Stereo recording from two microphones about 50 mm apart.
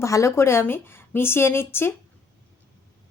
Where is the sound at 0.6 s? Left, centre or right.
Left.